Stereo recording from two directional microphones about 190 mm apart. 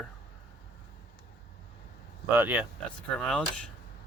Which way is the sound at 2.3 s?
5° right (ahead or behind).